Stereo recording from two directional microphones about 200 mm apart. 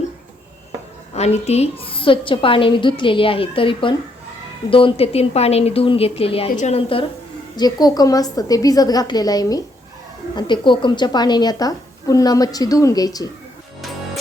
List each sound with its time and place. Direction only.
1.1 s a woman's voice: 30° left (ahead or behind)